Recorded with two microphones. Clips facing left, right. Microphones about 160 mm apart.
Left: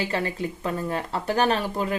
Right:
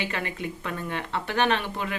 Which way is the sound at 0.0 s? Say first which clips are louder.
Left 4 dB; 35° left (ahead or behind).